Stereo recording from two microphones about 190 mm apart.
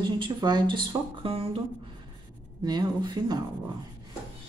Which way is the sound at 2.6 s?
20° right (ahead or behind).